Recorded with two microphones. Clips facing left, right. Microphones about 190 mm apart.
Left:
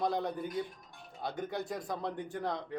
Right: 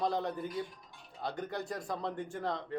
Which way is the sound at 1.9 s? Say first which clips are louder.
Even; 20° left (ahead or behind).